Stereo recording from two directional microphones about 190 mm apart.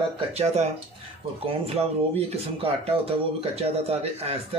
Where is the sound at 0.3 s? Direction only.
35° right (ahead or behind).